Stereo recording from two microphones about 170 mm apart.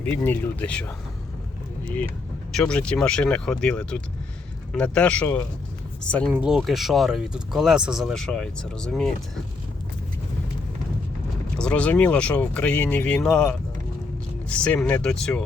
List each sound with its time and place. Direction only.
0.0 s speech: 10° left (ahead or behind)
2.5 s speech: 5° left (ahead or behind)
6.3 s speech: 5° right (ahead or behind)
11.5 s speech: 5° left (ahead or behind)